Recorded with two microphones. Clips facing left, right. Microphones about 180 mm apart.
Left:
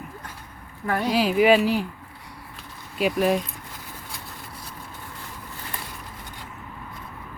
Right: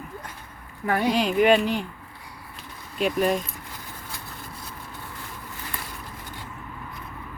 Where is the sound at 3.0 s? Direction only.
5° left (ahead or behind).